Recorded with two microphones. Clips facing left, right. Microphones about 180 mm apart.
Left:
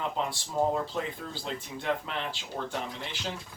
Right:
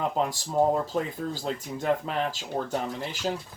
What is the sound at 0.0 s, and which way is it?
Speech, 45° right (ahead or behind).